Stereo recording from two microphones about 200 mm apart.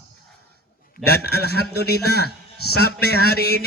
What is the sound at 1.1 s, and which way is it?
A man's voice, 55° left (ahead or behind).